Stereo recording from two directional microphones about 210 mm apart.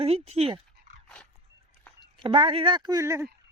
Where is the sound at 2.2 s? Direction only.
25° right (ahead or behind).